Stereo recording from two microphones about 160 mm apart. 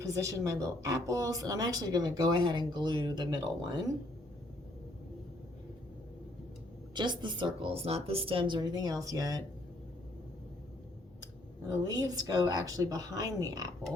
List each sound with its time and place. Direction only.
0.0 s speech: 20° right (ahead or behind)
6.9 s speech: 30° right (ahead or behind)
11.9 s speech: 25° right (ahead or behind)